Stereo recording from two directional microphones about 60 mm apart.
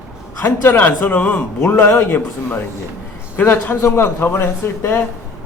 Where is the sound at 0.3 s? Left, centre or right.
Left.